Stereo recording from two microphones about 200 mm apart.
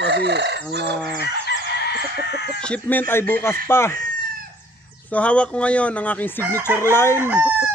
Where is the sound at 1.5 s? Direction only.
70° right (ahead or behind).